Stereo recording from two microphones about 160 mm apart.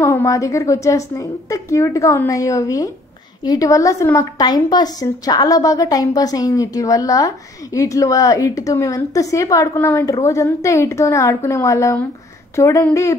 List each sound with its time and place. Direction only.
0.0 s a woman's voice: 20° left (ahead or behind)